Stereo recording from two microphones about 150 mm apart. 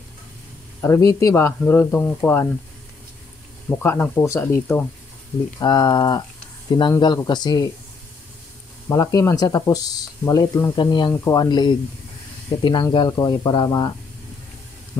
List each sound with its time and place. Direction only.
0.7 s speech: 20° left (ahead or behind)
3.6 s speech: 15° left (ahead or behind)
5.6 s speech: 25° left (ahead or behind)
8.8 s speech: 20° left (ahead or behind)